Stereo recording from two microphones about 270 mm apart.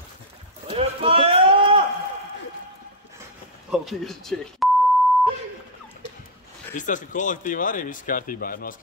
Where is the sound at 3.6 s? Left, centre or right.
Centre.